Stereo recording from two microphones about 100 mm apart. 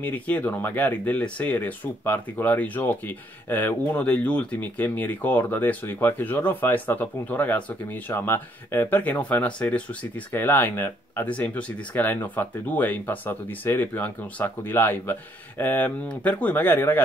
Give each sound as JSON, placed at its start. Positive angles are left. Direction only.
{"t": 0.0, "sound": "speech", "side_deg": 15}